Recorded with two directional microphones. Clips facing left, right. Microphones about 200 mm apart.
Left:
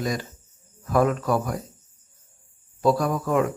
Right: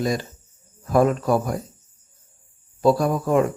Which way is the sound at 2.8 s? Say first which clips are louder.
Right 3 dB; 30° right (ahead or behind).